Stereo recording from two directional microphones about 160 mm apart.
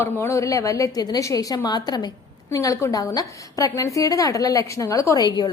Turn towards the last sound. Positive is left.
turn(degrees=25)  # may be behind; listen again after turning